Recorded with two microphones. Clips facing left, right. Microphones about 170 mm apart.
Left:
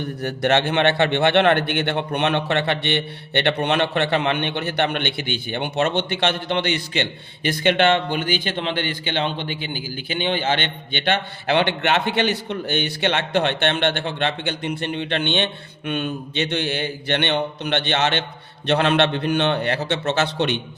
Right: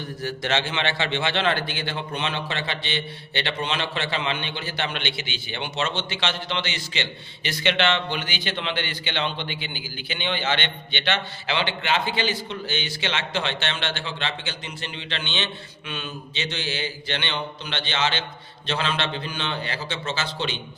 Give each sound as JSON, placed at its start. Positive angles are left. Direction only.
{"t": 0.0, "sound": "a man's voice", "side_deg": 60}